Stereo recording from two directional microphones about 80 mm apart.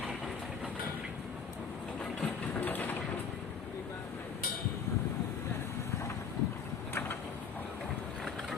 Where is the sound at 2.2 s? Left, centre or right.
Left.